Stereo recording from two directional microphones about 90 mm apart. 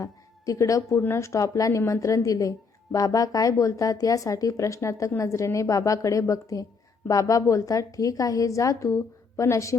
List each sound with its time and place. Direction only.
0.0 s a woman's voice: 40° left (ahead or behind)